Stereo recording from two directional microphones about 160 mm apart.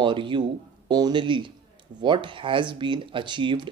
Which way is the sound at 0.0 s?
30° right (ahead or behind).